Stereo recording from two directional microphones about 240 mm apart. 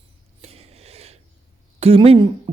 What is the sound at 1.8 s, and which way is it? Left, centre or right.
Speech, right.